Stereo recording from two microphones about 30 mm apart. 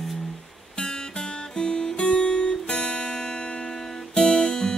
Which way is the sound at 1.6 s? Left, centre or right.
Left.